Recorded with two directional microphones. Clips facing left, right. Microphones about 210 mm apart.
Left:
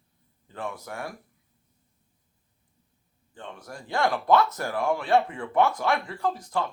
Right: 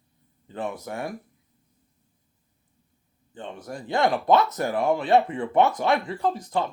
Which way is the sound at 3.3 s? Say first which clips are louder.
Right 5 dB; 20° right (ahead or behind).